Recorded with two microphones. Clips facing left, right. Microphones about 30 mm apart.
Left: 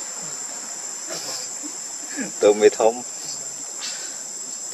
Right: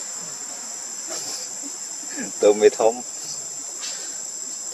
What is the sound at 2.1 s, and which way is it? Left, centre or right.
Speech, left.